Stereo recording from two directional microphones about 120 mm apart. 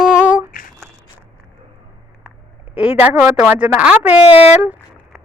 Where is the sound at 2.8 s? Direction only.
15° right (ahead or behind).